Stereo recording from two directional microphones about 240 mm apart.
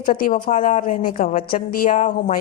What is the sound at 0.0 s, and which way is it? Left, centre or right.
A woman's voice, left.